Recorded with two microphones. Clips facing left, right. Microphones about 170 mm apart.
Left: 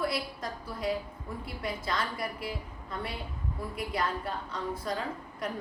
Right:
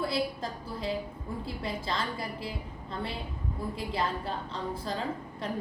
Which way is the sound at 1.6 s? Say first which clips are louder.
Left 1 dB; 25° right (ahead or behind).